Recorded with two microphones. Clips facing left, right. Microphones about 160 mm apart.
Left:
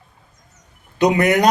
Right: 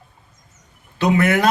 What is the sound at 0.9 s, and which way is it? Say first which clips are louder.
Speech: left 2 dB; 15° left (ahead or behind).